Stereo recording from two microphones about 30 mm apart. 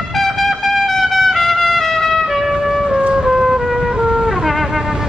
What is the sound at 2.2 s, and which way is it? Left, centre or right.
Trumpet, centre.